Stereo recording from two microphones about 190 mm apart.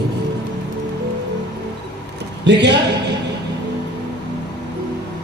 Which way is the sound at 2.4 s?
65° right (ahead or behind).